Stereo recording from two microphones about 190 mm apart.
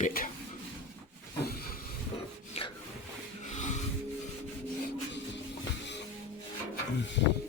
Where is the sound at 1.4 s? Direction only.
55° left (ahead or behind).